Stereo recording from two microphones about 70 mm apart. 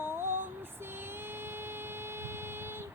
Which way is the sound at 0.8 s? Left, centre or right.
Right.